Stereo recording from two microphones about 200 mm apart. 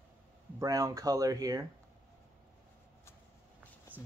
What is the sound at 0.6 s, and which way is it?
Speech, 15° right (ahead or behind).